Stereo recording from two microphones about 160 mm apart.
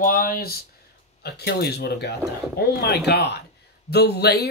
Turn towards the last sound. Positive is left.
turn(degrees=90)